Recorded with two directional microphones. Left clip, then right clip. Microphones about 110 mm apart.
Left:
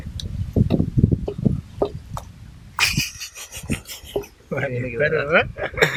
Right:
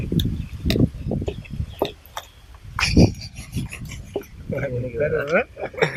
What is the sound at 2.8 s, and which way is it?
Filing, 45° left (ahead or behind).